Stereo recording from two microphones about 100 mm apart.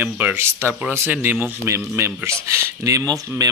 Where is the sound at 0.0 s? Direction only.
20° right (ahead or behind).